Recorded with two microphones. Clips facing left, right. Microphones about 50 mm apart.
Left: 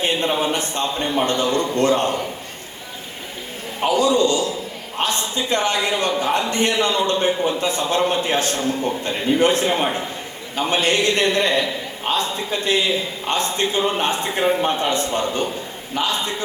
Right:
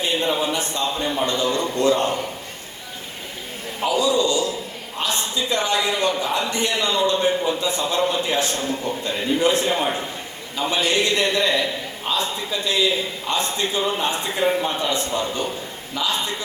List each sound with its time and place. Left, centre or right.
0.0 s a man's voice: left
3.8 s a man's voice: left